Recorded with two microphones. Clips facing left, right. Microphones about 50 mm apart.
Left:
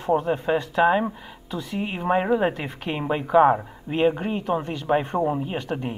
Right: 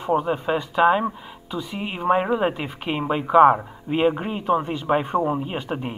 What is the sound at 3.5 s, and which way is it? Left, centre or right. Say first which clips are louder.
Speech: right 2 dB; centre.